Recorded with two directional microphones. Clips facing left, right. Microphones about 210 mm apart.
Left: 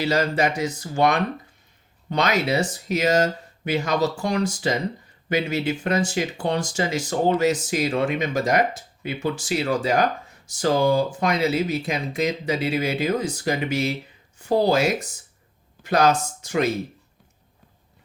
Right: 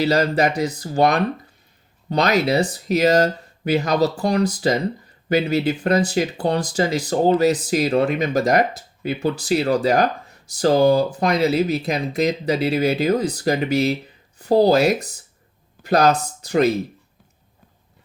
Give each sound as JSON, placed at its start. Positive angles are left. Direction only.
{"t": 0.0, "sound": "speech", "side_deg": -35}